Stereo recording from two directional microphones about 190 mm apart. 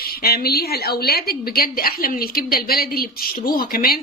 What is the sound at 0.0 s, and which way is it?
A woman's voice, 55° left (ahead or behind).